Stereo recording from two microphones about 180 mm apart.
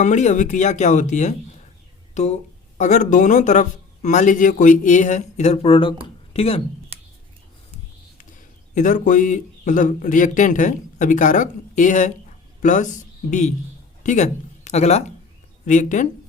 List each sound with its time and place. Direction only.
0.0 s speech: 40° left (ahead or behind)
6.9 s scissors: 35° right (ahead or behind)
8.7 s speech: 45° left (ahead or behind)